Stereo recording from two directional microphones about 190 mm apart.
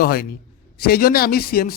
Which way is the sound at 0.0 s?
55° left (ahead or behind).